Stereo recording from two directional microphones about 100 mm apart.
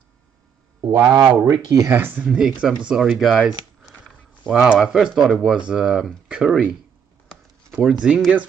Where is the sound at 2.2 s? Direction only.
10° right (ahead or behind).